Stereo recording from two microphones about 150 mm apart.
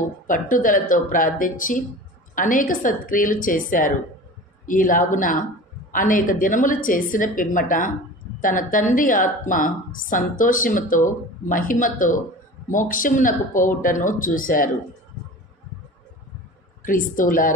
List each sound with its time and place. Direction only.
0.3 s a woman's voice: 65° left (ahead or behind)
16.8 s a woman's voice: 65° left (ahead or behind)